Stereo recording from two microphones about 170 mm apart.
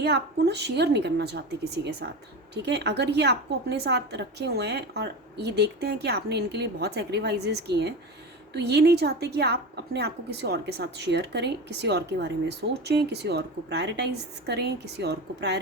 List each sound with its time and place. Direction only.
0.0 s a woman's voice: 75° right (ahead or behind)